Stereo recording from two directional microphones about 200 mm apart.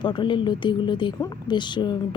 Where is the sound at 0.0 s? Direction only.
25° left (ahead or behind).